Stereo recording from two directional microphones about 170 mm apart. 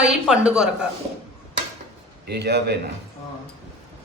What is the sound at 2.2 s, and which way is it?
Speech, 80° right.